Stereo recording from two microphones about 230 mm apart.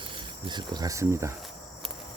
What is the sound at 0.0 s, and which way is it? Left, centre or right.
Speech, right.